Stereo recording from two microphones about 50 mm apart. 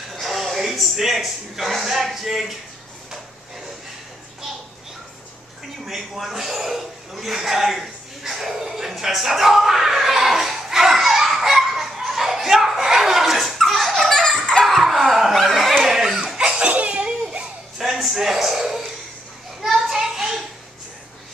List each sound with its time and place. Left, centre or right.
0.1 s speech: centre
5.9 s chuckle: centre
14.5 s laughter: centre
15.8 s a sound: centre
16.3 s laughter: centre
17.7 s a sound: centre